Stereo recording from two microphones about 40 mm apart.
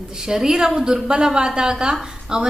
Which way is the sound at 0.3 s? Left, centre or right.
Centre.